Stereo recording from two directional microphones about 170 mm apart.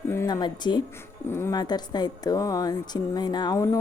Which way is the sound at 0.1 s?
20° left (ahead or behind).